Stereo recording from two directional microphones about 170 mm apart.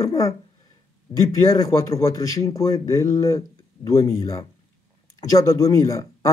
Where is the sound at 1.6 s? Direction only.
20° left (ahead or behind).